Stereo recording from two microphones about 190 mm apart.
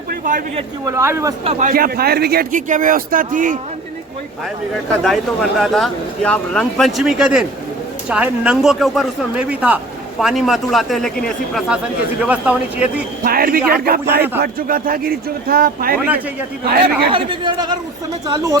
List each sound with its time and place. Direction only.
0.1 s a sound: 50° right (ahead or behind)
0.9 s speech: 15° right (ahead or behind)
1.5 s speech: 40° right (ahead or behind)
5.0 s speech: centre (ahead or behind)
13.2 s speech: 50° right (ahead or behind)
16.0 s speech: 10° right (ahead or behind)
17.1 s speech: 25° right (ahead or behind)